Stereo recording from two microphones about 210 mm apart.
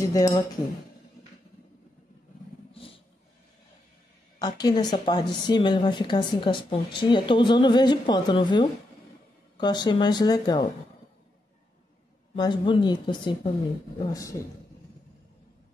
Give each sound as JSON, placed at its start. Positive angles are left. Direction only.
{"t": 0.0, "sound": "a man's voice", "side_deg": 15}
{"t": 2.7, "sound": "a sound", "side_deg": 25}
{"t": 4.4, "sound": "speech", "side_deg": 20}
{"t": 12.4, "sound": "a man's voice", "side_deg": 20}